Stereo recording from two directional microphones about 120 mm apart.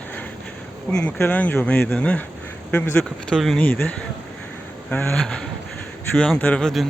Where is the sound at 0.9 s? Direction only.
5° left (ahead or behind).